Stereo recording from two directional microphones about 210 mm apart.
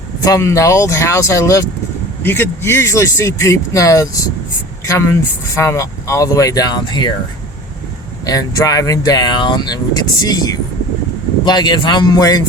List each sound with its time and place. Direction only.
0.3 s speech: 15° left (ahead or behind)
8.3 s speech: 15° left (ahead or behind)